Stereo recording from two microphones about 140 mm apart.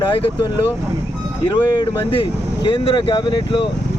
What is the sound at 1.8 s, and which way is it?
Speech, 35° left (ahead or behind).